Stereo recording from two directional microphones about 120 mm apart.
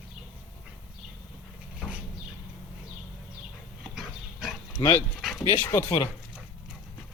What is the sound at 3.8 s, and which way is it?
Dog, 5° right (ahead or behind).